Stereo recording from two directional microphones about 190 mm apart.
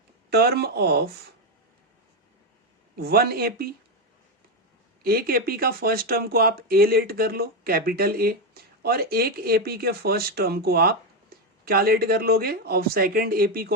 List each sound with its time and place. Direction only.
0.3 s speech: 55° right (ahead or behind)
3.0 s speech: 55° right (ahead or behind)
5.0 s speech: 50° right (ahead or behind)